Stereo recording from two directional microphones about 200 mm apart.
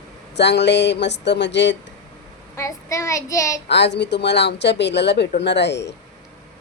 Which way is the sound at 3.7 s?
60° left (ahead or behind).